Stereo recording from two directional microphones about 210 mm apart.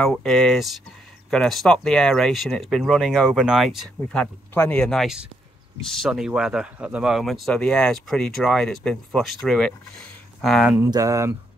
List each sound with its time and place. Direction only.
0.0 s speech: centre (ahead or behind)
10.9 s speech: 15° right (ahead or behind)